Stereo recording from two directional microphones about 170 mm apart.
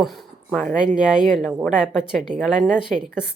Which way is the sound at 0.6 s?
50° right (ahead or behind).